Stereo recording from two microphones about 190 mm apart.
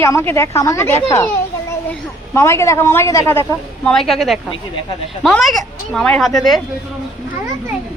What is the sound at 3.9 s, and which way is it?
Speech, centre (ahead or behind).